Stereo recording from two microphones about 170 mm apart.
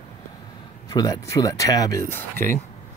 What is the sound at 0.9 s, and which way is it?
Speech, 20° left (ahead or behind).